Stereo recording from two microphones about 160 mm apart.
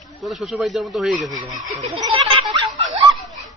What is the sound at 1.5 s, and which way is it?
Speech, 50° right (ahead or behind).